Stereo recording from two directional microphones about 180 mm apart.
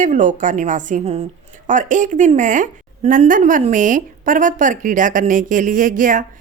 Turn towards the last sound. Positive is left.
turn(degrees=-50)  # may be behind; listen again after turning